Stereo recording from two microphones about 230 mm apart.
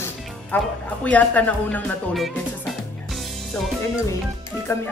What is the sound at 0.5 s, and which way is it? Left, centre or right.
A woman's voice, centre.